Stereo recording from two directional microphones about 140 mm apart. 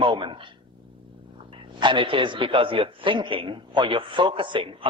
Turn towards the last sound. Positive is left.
turn(degrees=-40)  # may be behind; listen again after turning